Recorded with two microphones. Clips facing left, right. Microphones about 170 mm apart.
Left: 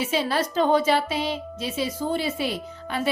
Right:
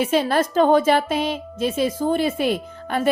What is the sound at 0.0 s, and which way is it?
A woman's voice, 50° right (ahead or behind).